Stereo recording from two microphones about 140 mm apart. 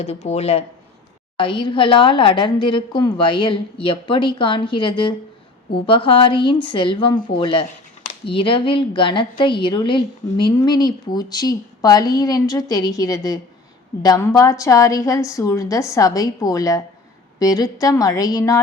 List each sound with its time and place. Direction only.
0.0 s speech: 50° left (ahead or behind)
1.4 s a woman's voice: 35° left (ahead or behind)